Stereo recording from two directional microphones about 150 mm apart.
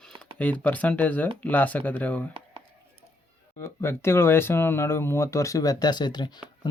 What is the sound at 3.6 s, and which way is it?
Speech, 15° left (ahead or behind).